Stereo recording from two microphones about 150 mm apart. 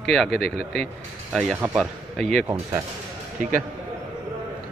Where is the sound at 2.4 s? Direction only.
20° right (ahead or behind).